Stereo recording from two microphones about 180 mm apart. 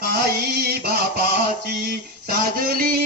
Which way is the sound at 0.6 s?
60° right (ahead or behind).